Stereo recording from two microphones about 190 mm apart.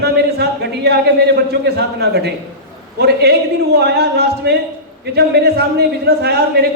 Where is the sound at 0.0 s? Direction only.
60° right (ahead or behind).